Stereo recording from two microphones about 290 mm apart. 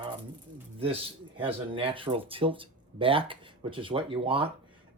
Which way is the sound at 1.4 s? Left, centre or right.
Centre.